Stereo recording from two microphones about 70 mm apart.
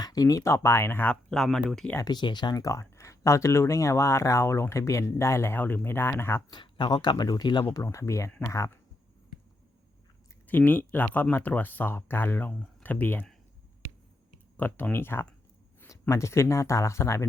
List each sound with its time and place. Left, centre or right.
0.0 s speech: left
1.1 s speech: centre
2.0 s speech: left
2.6 s speech: left
6.5 s speech: left
7.9 s speech: left
10.4 s speech: left
14.5 s speech: left
15.9 s speech: left